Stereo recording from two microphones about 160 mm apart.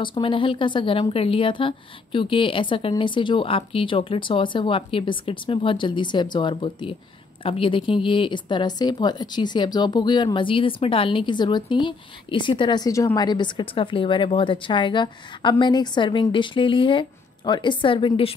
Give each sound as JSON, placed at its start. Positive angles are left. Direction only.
{"t": 0.0, "sound": "a woman's voice", "side_deg": 30}